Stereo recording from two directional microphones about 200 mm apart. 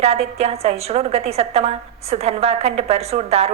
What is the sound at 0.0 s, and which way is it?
A woman's voice, 30° right (ahead or behind).